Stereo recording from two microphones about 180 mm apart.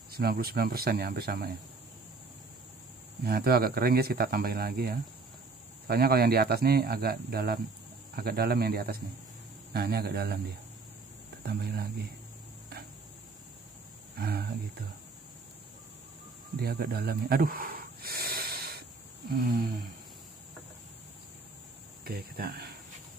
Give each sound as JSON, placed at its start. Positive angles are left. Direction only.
{"t": 0.1, "sound": "speech", "side_deg": -60}
{"t": 3.3, "sound": "speech", "side_deg": -60}
{"t": 11.4, "sound": "speech", "side_deg": -60}
{"t": 14.1, "sound": "speech", "side_deg": -60}
{"t": 16.5, "sound": "snake", "side_deg": -60}
{"t": 22.0, "sound": "speech", "side_deg": -60}